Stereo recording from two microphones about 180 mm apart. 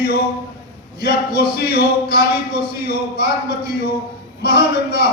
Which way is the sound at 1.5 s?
60° left (ahead or behind).